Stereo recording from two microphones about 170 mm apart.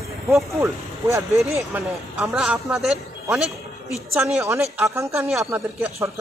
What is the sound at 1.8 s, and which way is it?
A man's voice, centre (ahead or behind).